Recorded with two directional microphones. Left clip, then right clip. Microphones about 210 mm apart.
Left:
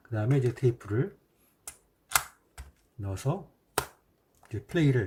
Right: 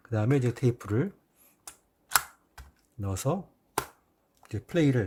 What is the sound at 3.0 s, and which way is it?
Speech, 45° right (ahead or behind).